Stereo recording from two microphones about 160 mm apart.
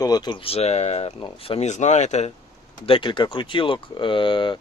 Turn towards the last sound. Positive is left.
turn(degrees=30)  # may be behind; listen again after turning